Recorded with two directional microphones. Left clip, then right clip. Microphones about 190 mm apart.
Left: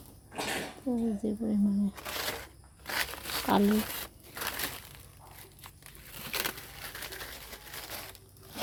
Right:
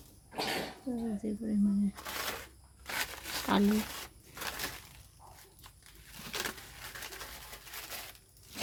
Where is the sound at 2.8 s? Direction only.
30° left (ahead or behind).